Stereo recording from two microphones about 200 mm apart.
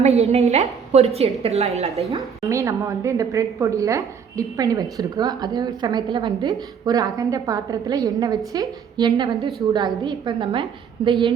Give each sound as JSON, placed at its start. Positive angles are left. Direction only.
{"t": 0.0, "sound": "a woman's voice", "side_deg": -35}
{"t": 2.0, "sound": "a woman's voice", "side_deg": -15}